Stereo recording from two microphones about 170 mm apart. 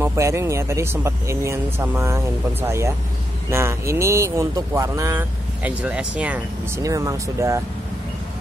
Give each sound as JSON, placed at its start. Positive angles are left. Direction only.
{"t": 0.0, "sound": "speech", "side_deg": -15}
{"t": 6.8, "sound": "speech", "side_deg": -20}